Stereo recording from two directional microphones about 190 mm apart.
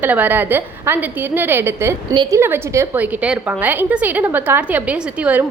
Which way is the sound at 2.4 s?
10° right (ahead or behind).